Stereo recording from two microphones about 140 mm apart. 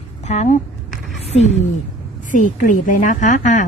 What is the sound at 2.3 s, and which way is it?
A woman's voice, 70° left (ahead or behind).